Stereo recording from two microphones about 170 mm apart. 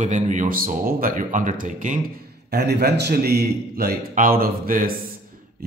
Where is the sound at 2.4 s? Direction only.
70° right (ahead or behind).